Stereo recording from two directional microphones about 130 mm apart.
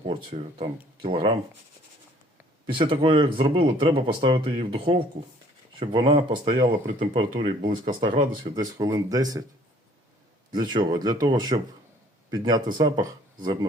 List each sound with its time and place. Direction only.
0.1 s speech: 45° right (ahead or behind)
2.7 s speech: 40° right (ahead or behind)
7.6 s speech: 90° right
8.5 s speech: 30° right (ahead or behind)
10.5 s speech: 35° right (ahead or behind)